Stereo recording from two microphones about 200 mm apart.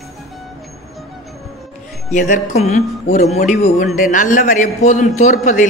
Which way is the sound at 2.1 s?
40° left (ahead or behind).